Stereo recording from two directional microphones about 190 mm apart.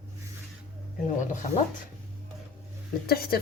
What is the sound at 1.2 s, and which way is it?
Speech, 40° left (ahead or behind).